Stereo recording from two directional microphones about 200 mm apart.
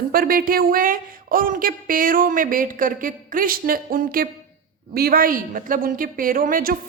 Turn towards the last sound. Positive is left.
turn(degrees=-45)  # may be behind; listen again after turning